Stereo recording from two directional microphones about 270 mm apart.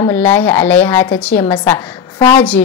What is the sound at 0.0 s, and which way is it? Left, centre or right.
A woman's voice, centre.